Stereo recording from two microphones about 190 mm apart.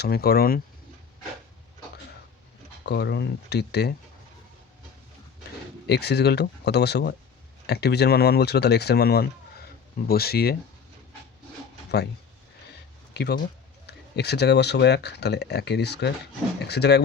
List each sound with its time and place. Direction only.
0.0 s speech: 55° left (ahead or behind)
2.8 s speech: 65° left (ahead or behind)
5.9 s speech: 60° left (ahead or behind)
13.1 s speech: 60° left (ahead or behind)